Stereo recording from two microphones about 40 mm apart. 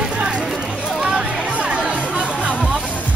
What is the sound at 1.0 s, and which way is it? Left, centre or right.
Music, centre.